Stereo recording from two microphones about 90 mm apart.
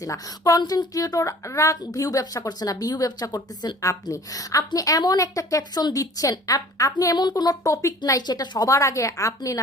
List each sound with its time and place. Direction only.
0.0 s a woman's voice: 40° left (ahead or behind)
0.6 s speech: 55° left (ahead or behind)
0.9 s a woman's voice: 40° left (ahead or behind)